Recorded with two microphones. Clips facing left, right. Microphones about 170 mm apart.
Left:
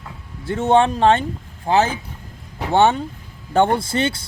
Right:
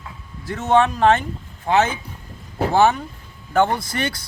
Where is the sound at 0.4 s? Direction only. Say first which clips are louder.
Left 2 dB; 30° left (ahead or behind).